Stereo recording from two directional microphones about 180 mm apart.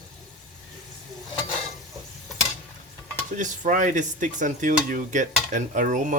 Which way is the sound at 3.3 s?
45° right (ahead or behind).